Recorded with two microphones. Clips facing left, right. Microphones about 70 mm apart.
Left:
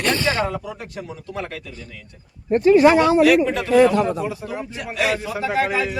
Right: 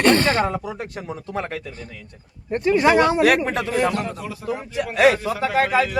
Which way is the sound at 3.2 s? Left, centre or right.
Right.